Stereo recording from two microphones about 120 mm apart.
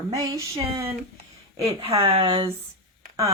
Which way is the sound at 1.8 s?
55° right (ahead or behind).